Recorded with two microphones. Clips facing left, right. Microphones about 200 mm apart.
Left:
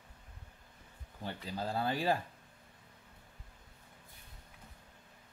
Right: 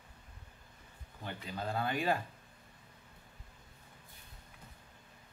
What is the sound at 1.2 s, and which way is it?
Speech, 30° left (ahead or behind).